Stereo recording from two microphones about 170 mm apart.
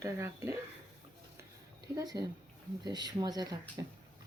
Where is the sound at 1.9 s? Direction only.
25° right (ahead or behind).